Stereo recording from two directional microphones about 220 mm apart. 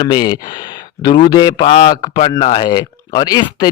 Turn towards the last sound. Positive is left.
turn(degrees=20)  # may be behind; listen again after turning